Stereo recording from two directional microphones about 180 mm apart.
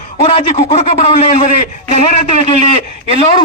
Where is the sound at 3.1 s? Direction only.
35° left (ahead or behind).